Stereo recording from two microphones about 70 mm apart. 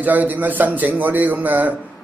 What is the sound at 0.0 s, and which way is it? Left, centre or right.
A man's voice, right.